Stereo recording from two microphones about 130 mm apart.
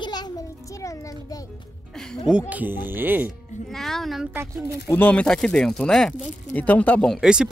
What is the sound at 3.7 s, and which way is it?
Speech, 5° left (ahead or behind).